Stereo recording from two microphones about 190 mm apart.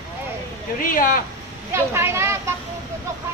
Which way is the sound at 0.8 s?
45° left (ahead or behind).